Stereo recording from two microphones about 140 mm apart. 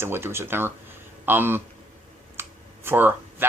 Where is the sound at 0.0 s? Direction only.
15° right (ahead or behind).